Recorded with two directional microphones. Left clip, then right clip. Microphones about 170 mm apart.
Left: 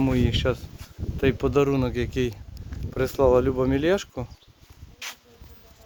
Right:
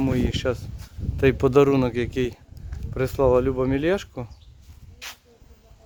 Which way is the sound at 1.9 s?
25° right (ahead or behind).